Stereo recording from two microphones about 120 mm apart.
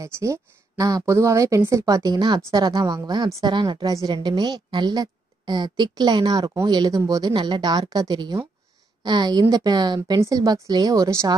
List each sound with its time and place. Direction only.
0.0 s a woman's voice: 25° right (ahead or behind)